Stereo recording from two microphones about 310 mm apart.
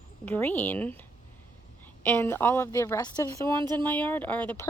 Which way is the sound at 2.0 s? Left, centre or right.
Centre.